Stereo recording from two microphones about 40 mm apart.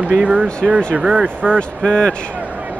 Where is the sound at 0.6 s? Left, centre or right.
Right.